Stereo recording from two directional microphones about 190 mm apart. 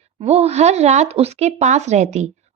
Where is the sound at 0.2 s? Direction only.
35° right (ahead or behind).